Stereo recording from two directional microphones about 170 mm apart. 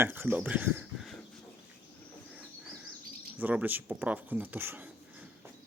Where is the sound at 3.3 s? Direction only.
10° right (ahead or behind).